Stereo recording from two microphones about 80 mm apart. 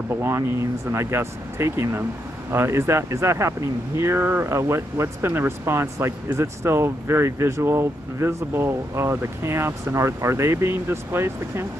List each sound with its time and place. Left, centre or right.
0.1 s speech: right